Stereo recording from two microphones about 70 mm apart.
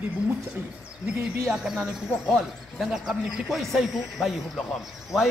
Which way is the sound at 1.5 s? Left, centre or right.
Centre.